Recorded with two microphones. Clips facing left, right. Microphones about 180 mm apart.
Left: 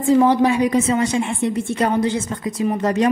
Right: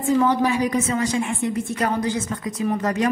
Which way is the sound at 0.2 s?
30° left (ahead or behind).